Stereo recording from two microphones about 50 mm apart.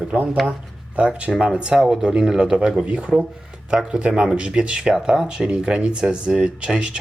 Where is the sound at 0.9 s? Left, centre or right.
Right.